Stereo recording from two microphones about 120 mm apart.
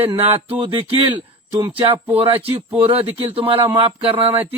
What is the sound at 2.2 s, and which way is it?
A man's voice, 50° right (ahead or behind).